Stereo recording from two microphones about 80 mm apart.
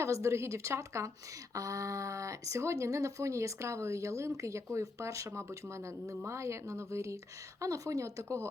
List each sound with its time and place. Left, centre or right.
0.0 s speech: right